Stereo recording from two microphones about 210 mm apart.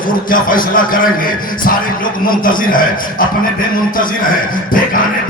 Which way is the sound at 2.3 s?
40° left (ahead or behind).